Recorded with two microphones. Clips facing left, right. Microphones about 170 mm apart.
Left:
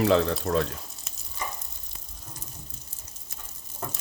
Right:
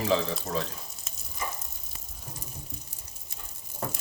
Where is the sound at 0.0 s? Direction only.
60° left (ahead or behind).